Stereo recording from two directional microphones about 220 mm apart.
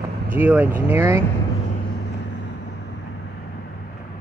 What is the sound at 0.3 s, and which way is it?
Speech, 10° right (ahead or behind).